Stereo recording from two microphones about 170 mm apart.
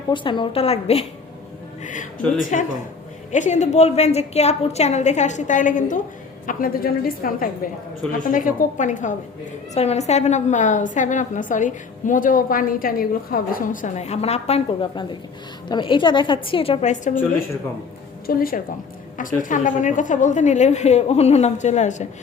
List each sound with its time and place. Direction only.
0.1 s a woman's voice: 30° left (ahead or behind)
1.8 s a woman's voice: 50° left (ahead or behind)
6.5 s a woman's voice: 60° left (ahead or behind)
18.3 s a woman's voice: 60° left (ahead or behind)